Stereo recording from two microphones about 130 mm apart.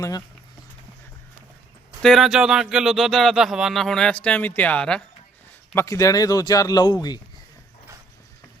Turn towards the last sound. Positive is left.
turn(degrees=30)  # may be behind; listen again after turning